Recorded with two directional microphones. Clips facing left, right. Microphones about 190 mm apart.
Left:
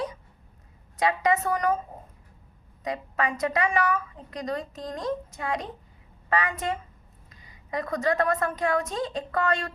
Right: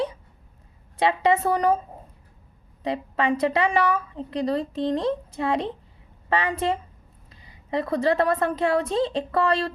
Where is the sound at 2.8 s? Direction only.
30° right (ahead or behind).